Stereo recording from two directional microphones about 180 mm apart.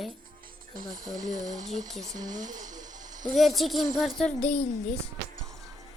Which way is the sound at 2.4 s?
45° right (ahead or behind).